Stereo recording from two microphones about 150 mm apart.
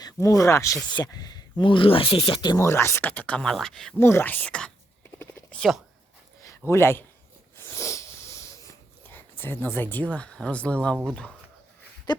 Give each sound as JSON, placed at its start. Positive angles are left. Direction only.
{"t": 0.0, "sound": "speech", "side_deg": 20}
{"t": 2.6, "sound": "speech", "side_deg": 15}
{"t": 3.9, "sound": "speech", "side_deg": 15}
{"t": 5.2, "sound": "a sound", "side_deg": 10}
{"t": 6.7, "sound": "speech", "side_deg": 15}
{"t": 7.7, "sound": "sniff", "side_deg": 20}
{"t": 9.4, "sound": "speech", "side_deg": 15}
{"t": 12.1, "sound": "a sound", "side_deg": 30}